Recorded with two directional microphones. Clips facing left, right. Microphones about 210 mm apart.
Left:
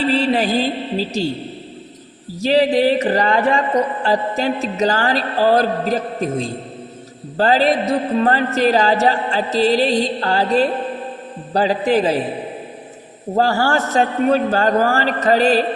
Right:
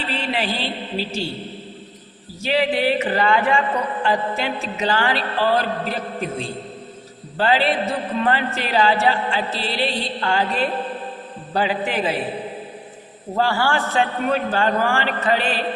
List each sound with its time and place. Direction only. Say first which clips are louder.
0.0 s a man's voice: left 8 dB; 40° left (ahead or behind)
2.4 s a man's voice: left 6 dB; 35° left (ahead or behind)
13.3 s a man's voice: left 4 dB; 40° left (ahead or behind)